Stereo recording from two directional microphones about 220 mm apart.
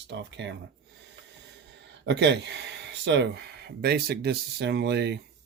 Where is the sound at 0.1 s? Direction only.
55° right (ahead or behind).